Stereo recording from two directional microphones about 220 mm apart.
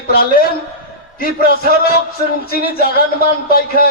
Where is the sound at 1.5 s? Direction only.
45° left (ahead or behind).